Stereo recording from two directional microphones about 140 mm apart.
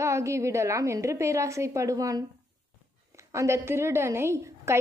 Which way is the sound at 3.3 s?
20° right (ahead or behind).